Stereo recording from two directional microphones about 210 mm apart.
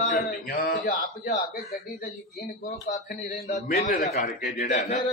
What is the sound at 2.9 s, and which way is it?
Speech, 40° left (ahead or behind).